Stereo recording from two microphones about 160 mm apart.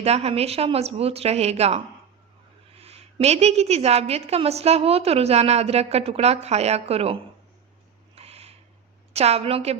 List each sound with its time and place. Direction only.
0.0 s a woman's voice: 40° right (ahead or behind)
8.1 s a sound: 40° right (ahead or behind)
9.1 s a woman's voice: 40° right (ahead or behind)